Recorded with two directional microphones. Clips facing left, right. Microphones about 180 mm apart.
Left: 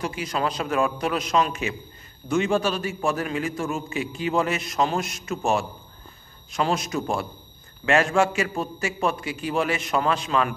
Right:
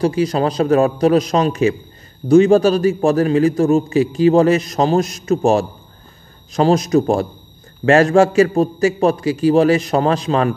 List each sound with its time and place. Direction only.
0.0 s a man's voice: 35° right (ahead or behind)